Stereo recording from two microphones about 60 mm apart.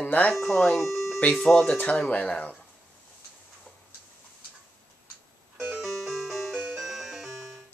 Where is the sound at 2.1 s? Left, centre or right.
Left.